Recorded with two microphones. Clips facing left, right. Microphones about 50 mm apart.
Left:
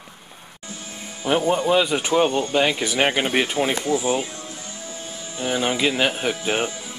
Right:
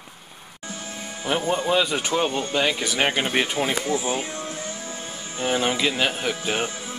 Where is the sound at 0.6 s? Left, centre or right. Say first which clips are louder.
Right 2 dB; right.